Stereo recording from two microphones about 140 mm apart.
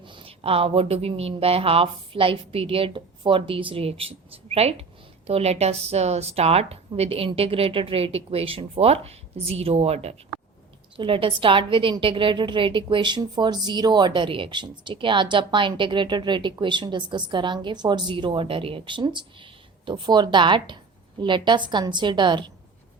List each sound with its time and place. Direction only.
0.0 s a woman's voice: 35° right (ahead or behind)